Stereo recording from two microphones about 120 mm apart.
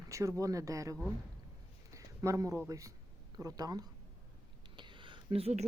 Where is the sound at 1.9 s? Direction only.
25° right (ahead or behind).